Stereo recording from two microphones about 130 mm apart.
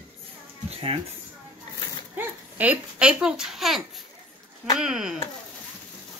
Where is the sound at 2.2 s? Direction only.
10° right (ahead or behind).